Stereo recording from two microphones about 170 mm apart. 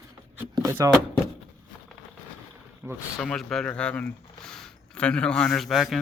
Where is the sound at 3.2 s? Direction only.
5° left (ahead or behind).